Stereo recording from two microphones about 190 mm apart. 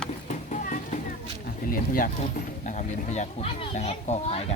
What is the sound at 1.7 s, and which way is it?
Speech, 45° left (ahead or behind).